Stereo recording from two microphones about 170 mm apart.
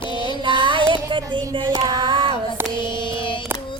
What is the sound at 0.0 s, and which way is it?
Child singing, 30° left (ahead or behind).